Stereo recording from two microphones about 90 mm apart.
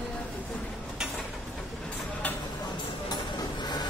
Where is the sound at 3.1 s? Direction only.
50° left (ahead or behind).